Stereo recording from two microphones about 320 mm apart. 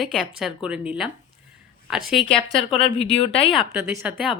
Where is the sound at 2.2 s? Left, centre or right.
Centre.